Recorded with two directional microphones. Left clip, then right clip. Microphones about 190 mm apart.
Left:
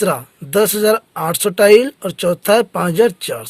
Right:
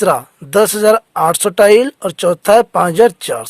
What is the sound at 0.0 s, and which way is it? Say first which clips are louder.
Speech: right 5 dB; 45° right (ahead or behind).